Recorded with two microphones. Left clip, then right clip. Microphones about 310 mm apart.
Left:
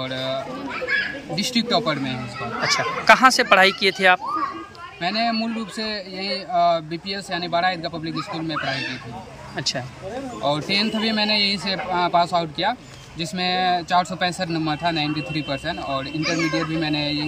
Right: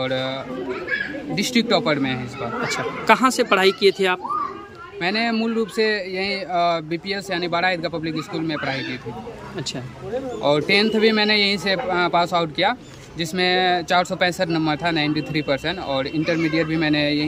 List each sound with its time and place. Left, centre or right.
0.0 s speech: centre
1.4 s speech: centre
10.4 s speech: centre